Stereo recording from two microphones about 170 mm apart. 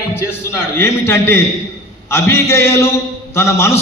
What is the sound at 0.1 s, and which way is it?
A man's voice, 15° left (ahead or behind).